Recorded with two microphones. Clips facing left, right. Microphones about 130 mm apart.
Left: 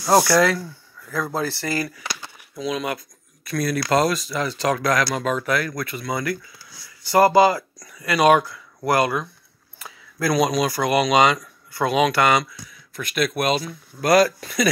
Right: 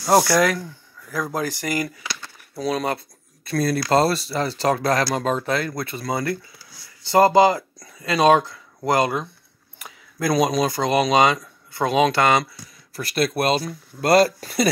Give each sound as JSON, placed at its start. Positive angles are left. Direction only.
{"t": 1.1, "sound": "speech", "side_deg": -15}
{"t": 2.5, "sound": "speech", "side_deg": -40}